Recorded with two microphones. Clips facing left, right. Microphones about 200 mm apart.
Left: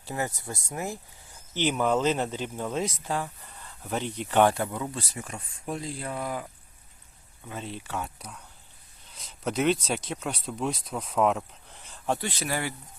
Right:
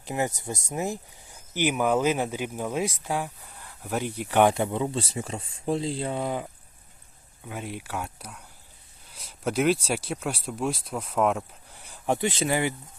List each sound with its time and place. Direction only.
0.0 s speech: 15° right (ahead or behind)
7.4 s speech: 10° right (ahead or behind)